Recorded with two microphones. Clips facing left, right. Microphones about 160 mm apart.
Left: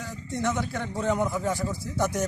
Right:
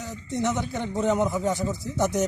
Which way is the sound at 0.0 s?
20° right (ahead or behind).